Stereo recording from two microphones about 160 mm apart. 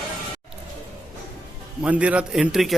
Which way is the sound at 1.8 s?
10° right (ahead or behind).